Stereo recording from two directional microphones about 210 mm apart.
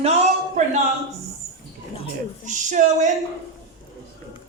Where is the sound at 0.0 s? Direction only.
30° right (ahead or behind).